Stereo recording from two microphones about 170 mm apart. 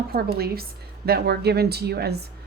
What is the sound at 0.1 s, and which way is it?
A woman's voice, 65° right (ahead or behind).